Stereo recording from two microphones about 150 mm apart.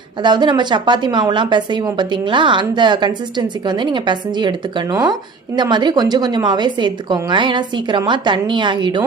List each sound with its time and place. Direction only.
0.2 s a woman's voice: 30° right (ahead or behind)